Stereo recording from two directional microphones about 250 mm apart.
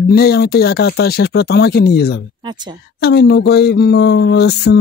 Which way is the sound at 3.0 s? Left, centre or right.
Left.